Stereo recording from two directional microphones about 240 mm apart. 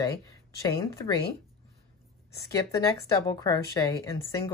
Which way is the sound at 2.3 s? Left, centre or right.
Centre.